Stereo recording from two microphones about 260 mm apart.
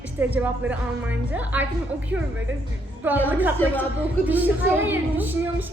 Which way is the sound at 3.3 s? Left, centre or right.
Centre.